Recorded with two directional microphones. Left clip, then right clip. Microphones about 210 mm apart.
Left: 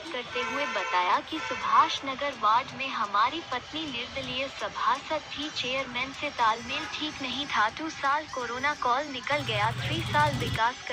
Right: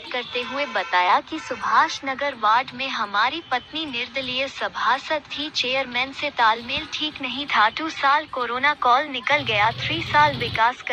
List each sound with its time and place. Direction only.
0.1 s speech: 55° right (ahead or behind)